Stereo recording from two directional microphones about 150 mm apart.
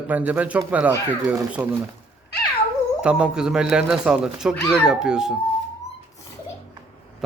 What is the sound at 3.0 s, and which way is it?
Speech, 5° right (ahead or behind).